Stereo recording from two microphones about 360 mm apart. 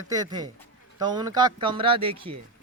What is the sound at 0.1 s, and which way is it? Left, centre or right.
A man's voice, centre.